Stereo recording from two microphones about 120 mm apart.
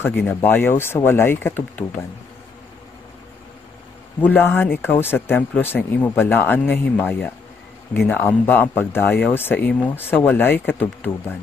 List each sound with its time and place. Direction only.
0.0 s speech: 15° left (ahead or behind)
4.2 s speech: 15° left (ahead or behind)